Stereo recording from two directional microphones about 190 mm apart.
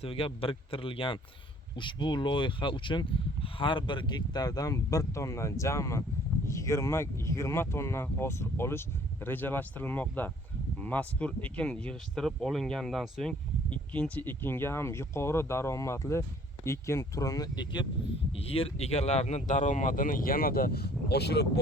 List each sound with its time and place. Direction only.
0.0 s speech: 30° left (ahead or behind); by 21.6 s 60° left (ahead or behind)